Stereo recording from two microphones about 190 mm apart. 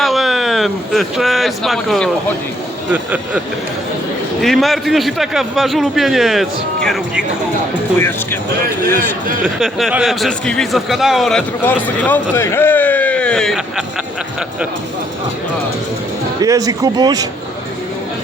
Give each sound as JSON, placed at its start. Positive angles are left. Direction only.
{"t": 0.0, "sound": "speech", "side_deg": 0}
{"t": 7.9, "sound": "speech", "side_deg": 10}
{"t": 9.0, "sound": "speech", "side_deg": 0}
{"t": 16.4, "sound": "speech", "side_deg": -20}